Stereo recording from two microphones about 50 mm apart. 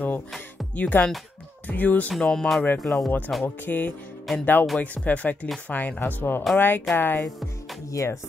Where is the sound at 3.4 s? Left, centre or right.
Left.